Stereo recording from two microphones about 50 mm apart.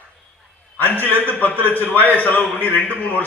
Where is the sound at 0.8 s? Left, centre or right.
Left.